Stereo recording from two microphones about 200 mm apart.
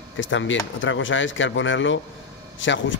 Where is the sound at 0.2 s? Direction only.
70° left (ahead or behind).